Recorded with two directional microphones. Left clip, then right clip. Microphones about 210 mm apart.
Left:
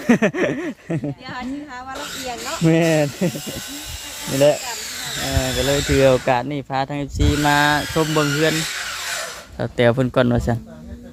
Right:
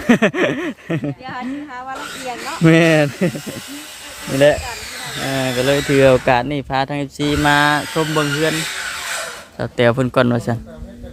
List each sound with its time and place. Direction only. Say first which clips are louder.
0.1 s speech: right 3 dB; 5° right (ahead or behind)
2.6 s speech: right 5 dB; 25° right (ahead or behind)
5.3 s speech: right 4 dB; 25° right (ahead or behind); by 8.5 s 10° left (ahead or behind)
9.6 s speech: right 2 dB; centre (ahead or behind)